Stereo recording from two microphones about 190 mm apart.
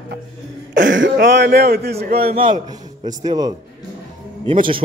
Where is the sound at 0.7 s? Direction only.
80° right; by 2.3 s 55° right (ahead or behind).